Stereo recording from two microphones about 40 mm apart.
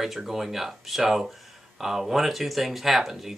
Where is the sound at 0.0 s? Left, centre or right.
Centre.